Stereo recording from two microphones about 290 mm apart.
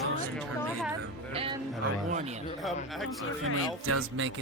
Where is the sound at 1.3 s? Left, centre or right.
Centre.